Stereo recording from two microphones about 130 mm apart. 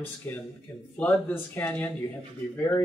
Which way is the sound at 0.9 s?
15° left (ahead or behind).